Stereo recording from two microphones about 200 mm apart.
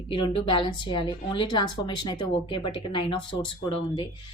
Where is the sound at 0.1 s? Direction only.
25° left (ahead or behind).